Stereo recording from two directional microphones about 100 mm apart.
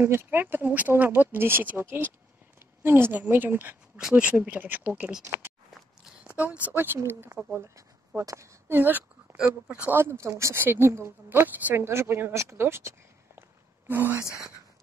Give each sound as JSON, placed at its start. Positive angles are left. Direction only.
{"t": 0.0, "sound": "speech", "side_deg": -25}
{"t": 6.2, "sound": "speech", "side_deg": -15}
{"t": 13.4, "sound": "a sound", "side_deg": -20}